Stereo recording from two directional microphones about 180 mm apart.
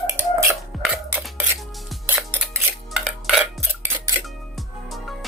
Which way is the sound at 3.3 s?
10° right (ahead or behind).